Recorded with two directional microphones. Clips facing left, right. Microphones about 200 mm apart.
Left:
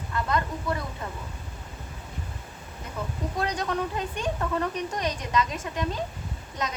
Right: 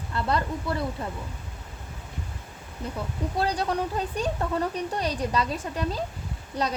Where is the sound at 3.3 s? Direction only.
35° right (ahead or behind).